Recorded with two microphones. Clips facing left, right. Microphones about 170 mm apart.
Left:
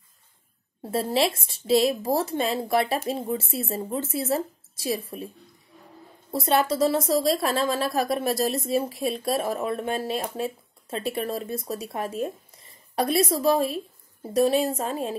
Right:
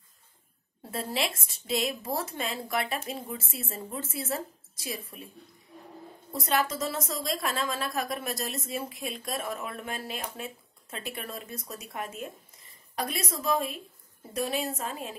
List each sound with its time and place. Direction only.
0.9 s a woman's voice: 30° left (ahead or behind)
6.3 s a woman's voice: 30° left (ahead or behind)